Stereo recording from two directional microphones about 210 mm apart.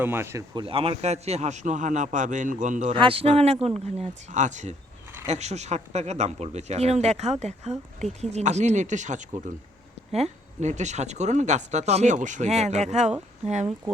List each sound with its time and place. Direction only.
0.0 s speech: 10° right (ahead or behind)
0.6 s speech: 25° right (ahead or behind)